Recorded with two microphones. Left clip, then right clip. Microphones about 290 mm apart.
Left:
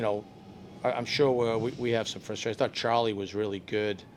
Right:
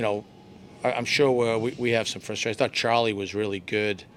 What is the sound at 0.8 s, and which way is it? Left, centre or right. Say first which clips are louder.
Speech: right 4 dB; right.